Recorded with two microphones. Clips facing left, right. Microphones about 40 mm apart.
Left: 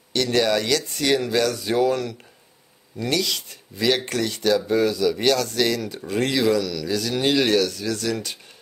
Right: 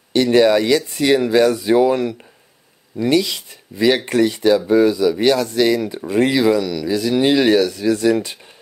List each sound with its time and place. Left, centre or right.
0.1 s speech: centre